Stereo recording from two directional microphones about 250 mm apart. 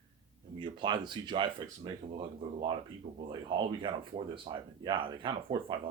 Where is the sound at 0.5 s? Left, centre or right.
Centre.